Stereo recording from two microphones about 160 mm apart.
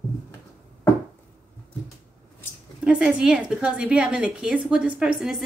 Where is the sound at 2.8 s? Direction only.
5° right (ahead or behind).